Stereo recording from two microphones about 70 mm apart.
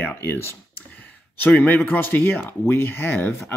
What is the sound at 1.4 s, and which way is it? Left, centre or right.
Speech, left.